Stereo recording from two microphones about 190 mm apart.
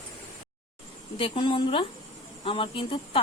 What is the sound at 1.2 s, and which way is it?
A woman's voice, 25° left (ahead or behind).